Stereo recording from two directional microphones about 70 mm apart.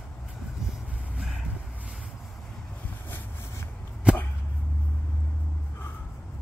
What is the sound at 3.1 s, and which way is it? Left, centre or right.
Vehicle, left.